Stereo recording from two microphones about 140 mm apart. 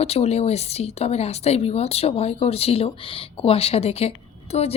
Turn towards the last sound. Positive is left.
turn(degrees=50)  # may be behind; listen again after turning